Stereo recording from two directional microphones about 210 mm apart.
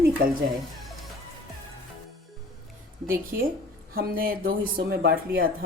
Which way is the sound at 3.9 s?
45° right (ahead or behind).